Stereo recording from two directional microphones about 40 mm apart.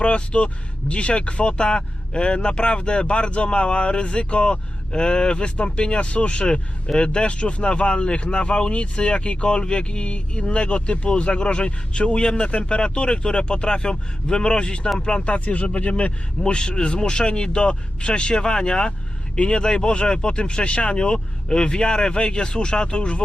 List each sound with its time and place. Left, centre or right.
0.0 s speech: left